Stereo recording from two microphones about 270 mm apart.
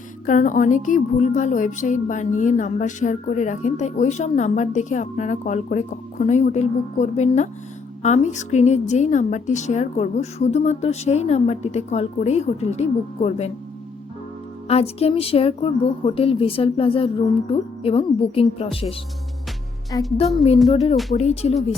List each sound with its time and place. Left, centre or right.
0.3 s a woman's voice: left
14.7 s a woman's voice: left
20.9 s speech: centre
21.2 s a woman's voice: left